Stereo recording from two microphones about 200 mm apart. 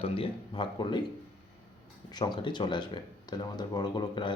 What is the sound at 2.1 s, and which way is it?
Speech, 20° left (ahead or behind).